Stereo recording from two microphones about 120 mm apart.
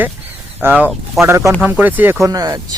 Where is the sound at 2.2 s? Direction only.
30° right (ahead or behind).